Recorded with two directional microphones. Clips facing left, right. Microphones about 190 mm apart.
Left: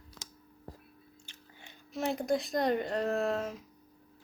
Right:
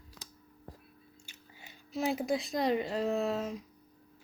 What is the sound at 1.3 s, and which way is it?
Speech, 5° right (ahead or behind).